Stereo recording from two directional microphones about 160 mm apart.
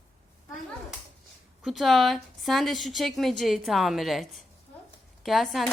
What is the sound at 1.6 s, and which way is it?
A woman's voice, centre (ahead or behind).